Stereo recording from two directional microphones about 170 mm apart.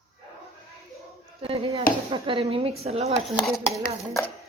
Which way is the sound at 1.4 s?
35° right (ahead or behind).